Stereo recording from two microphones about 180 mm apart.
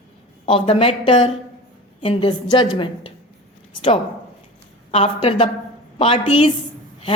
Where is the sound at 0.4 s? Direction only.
30° left (ahead or behind).